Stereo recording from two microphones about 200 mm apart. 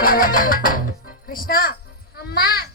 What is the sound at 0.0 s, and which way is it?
A child's voice, 45° left (ahead or behind).